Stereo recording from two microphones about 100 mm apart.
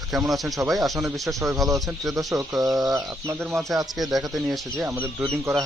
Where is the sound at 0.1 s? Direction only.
Centre (ahead or behind).